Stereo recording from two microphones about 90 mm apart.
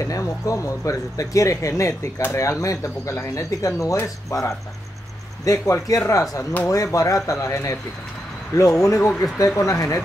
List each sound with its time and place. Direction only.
0.0 s speech: 35° left (ahead or behind)